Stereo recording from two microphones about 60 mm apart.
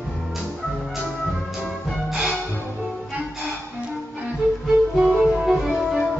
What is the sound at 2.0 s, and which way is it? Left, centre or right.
Music, centre.